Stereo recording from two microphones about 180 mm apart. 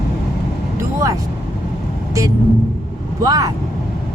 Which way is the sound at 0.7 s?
20° right (ahead or behind).